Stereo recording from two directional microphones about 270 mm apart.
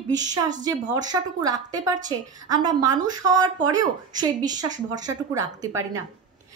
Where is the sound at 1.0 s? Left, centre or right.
Centre.